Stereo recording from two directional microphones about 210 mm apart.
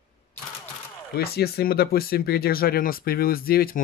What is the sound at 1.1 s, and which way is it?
Speech, 50° left (ahead or behind).